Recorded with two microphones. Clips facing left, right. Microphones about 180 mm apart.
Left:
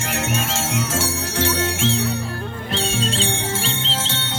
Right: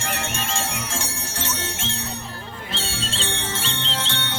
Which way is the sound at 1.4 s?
75° left (ahead or behind).